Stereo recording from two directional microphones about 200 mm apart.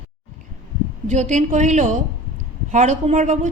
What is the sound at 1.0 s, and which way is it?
A woman's voice, 35° right (ahead or behind).